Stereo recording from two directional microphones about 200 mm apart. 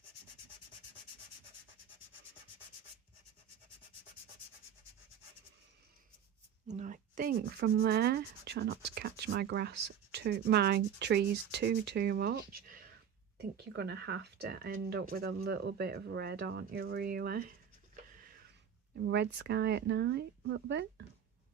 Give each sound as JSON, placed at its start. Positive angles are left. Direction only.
{"t": 6.7, "sound": "speech", "side_deg": -40}
{"t": 13.7, "sound": "speech", "side_deg": -55}
{"t": 18.1, "sound": "a sound", "side_deg": -45}
{"t": 19.0, "sound": "speech", "side_deg": -60}